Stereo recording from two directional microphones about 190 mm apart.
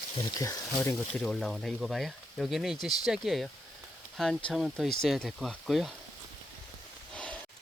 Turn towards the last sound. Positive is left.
turn(degrees=5)  # may be behind; listen again after turning